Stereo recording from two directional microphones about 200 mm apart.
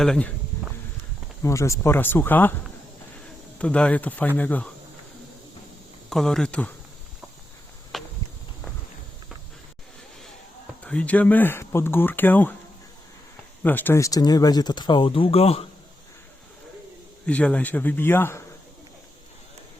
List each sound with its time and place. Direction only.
0.0 s speech: 5° left (ahead or behind)
1.4 s speech: 15° left (ahead or behind)
3.6 s speech: 5° left (ahead or behind)
6.1 s speech: centre (ahead or behind)
7.9 s a sound: centre (ahead or behind)
10.8 s speech: 5° left (ahead or behind)
13.6 s speech: 10° left (ahead or behind); by 15.6 s 30° left (ahead or behind)
17.2 s speech: 5° left (ahead or behind)